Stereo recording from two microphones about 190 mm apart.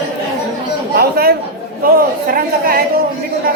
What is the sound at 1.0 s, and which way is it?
Chatter, 55° right (ahead or behind).